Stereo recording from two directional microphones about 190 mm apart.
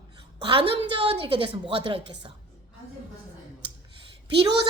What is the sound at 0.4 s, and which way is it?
A woman's voice, 30° right (ahead or behind).